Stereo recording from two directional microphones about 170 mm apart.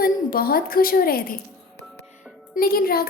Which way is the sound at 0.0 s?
60° left (ahead or behind).